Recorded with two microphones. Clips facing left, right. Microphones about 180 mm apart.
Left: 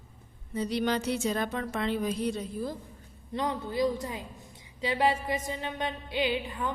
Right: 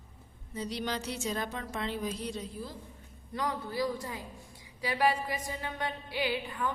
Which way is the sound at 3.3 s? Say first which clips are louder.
Left 3 dB; 20° left (ahead or behind).